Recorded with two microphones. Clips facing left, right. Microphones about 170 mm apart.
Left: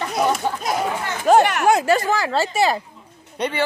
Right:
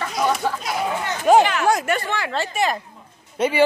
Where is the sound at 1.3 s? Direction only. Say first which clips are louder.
Even; centre (ahead or behind).